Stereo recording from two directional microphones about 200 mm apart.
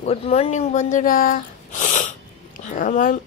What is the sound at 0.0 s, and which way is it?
Speech, 30° left (ahead or behind).